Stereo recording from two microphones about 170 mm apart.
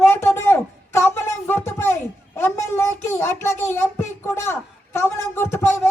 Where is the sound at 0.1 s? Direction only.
15° left (ahead or behind).